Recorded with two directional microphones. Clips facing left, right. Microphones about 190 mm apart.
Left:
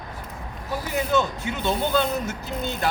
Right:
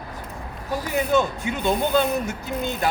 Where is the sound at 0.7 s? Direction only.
15° right (ahead or behind).